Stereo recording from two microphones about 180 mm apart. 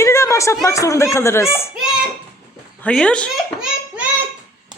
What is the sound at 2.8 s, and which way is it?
Speech, 5° left (ahead or behind).